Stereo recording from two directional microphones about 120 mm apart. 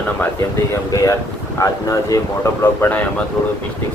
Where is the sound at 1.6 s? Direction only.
25° left (ahead or behind).